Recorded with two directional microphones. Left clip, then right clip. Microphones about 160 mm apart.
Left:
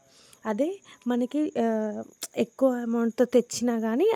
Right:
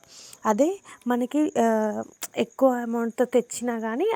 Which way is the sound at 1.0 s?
15° left (ahead or behind).